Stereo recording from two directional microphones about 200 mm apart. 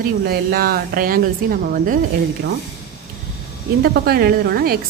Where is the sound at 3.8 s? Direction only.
50° right (ahead or behind).